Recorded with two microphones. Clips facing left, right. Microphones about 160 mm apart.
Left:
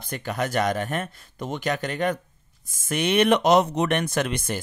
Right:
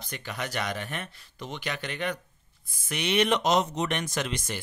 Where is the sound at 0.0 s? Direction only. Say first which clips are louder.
Left 8 dB; 50° left (ahead or behind).